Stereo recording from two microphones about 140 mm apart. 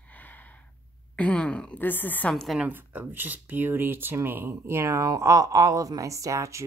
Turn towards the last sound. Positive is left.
turn(degrees=-20)  # may be behind; listen again after turning